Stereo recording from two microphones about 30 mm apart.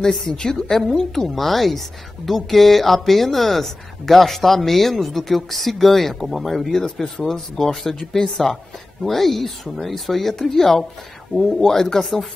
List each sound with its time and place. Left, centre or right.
0.0 s a woman's voice: centre
0.6 s a woman's voice: centre
6.8 s a woman's voice: centre
7.5 s a woman's voice: centre